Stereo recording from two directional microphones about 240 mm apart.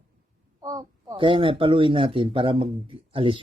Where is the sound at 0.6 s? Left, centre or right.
Centre.